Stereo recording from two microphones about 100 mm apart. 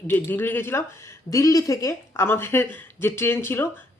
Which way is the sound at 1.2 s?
35° left (ahead or behind).